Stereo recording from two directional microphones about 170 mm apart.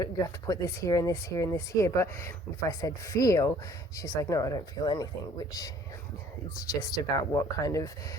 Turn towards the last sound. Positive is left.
turn(degrees=20)  # may be behind; listen again after turning